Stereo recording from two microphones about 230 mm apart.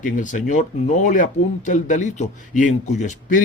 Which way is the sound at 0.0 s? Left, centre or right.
Left.